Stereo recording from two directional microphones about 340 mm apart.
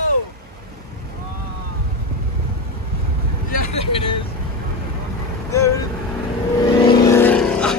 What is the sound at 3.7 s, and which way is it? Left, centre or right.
Vehicle, centre.